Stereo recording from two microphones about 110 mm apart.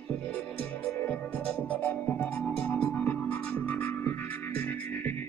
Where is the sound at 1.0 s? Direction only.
15° left (ahead or behind).